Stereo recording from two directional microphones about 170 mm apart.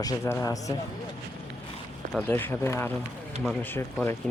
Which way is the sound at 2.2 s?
10° left (ahead or behind).